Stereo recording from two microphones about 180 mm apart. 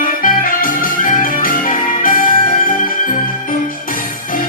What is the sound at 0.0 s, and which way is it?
Organ, 50° left (ahead or behind).